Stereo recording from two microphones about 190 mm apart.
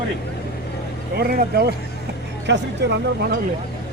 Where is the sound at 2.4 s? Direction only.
65° right (ahead or behind).